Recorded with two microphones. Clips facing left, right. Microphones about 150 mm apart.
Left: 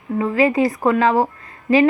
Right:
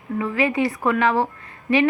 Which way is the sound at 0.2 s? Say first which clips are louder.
Left 5 dB; 40° left (ahead or behind).